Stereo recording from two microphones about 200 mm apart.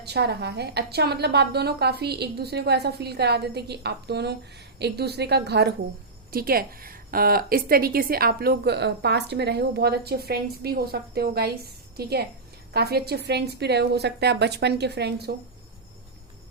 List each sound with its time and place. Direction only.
0.0 s a woman's voice: 55° right (ahead or behind)